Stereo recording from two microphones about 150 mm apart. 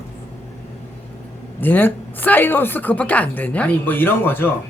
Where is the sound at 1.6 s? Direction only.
10° left (ahead or behind).